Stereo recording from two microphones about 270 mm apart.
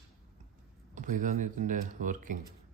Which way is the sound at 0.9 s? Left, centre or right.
Right.